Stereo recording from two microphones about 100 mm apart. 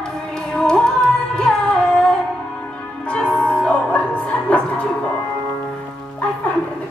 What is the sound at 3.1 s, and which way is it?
Music, 10° left (ahead or behind).